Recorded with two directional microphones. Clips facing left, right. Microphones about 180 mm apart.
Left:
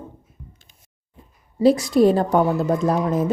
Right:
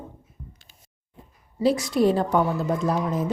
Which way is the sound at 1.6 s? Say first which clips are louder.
Left 5 dB; 40° left (ahead or behind).